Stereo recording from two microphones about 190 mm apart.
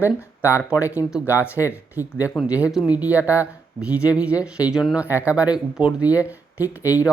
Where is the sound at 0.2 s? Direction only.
10° left (ahead or behind).